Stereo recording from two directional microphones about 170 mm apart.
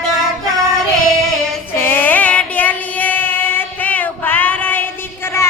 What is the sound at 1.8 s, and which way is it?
Female singing, 10° left (ahead or behind).